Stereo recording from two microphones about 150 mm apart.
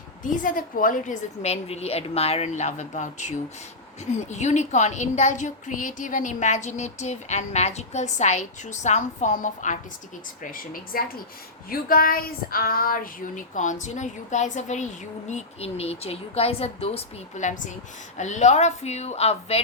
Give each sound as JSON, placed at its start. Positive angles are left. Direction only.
{"t": 0.2, "sound": "a woman's voice", "side_deg": 60}
{"t": 10.4, "sound": "a woman's voice", "side_deg": 65}